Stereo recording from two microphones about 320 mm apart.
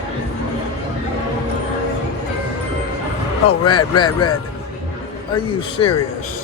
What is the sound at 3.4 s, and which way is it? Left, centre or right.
Speech, centre.